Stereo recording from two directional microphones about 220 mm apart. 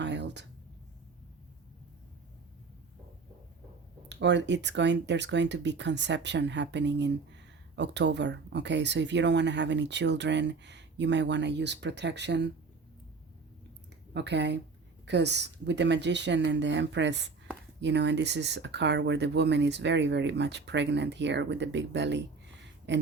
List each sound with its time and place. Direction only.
0.0 s a sound: 50° right (ahead or behind)
4.1 s speech: 50° right (ahead or behind)
14.1 s speech: 50° right (ahead or behind)